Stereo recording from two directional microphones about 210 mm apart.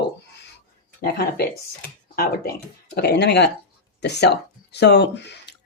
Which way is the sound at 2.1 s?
45° left (ahead or behind).